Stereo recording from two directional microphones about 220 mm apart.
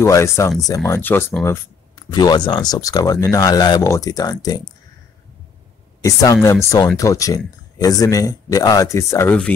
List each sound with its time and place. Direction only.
0.0 s speech: 15° left (ahead or behind)
6.0 s speech: 15° left (ahead or behind)